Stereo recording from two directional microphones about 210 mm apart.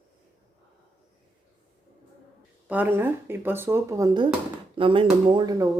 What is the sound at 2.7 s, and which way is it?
Speech, 10° right (ahead or behind).